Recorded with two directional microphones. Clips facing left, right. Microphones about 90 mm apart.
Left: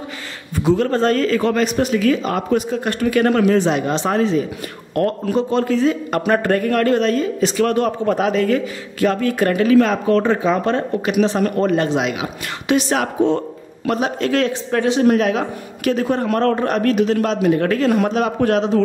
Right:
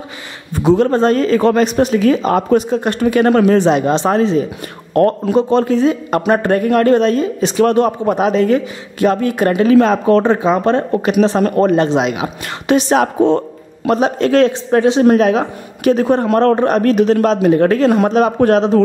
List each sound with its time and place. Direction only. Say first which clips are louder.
0.7 s a man's voice: right 5 dB; 25° right (ahead or behind)
16.9 s speech: right 5 dB; 35° right (ahead or behind)